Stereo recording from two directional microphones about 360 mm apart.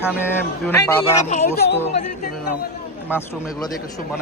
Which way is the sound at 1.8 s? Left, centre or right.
Centre.